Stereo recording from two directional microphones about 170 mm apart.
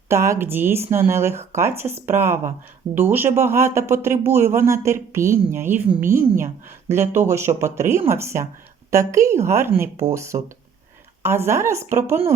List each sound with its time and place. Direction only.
0.1 s speech: 15° right (ahead or behind)
6.9 s speech: 15° right (ahead or behind)